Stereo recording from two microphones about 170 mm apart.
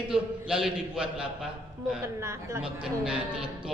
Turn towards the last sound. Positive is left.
turn(degrees=-5)  # may be behind; listen again after turning